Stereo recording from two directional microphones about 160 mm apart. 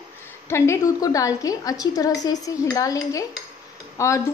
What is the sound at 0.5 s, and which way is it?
A woman's voice, 15° left (ahead or behind).